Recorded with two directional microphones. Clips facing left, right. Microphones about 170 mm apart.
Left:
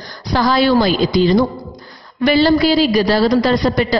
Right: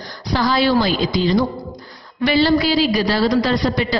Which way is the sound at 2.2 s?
45° left (ahead or behind).